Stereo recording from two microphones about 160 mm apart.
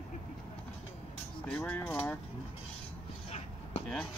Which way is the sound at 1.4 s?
10° left (ahead or behind).